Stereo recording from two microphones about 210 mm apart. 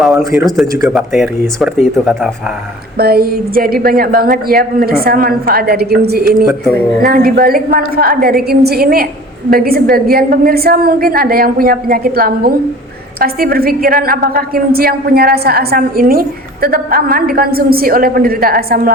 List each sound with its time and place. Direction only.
0.4 s speech: centre (ahead or behind)
3.0 s a woman's voice: 45° right (ahead or behind)